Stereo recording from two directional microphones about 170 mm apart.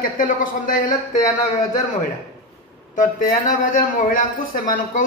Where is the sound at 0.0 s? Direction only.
50° left (ahead or behind).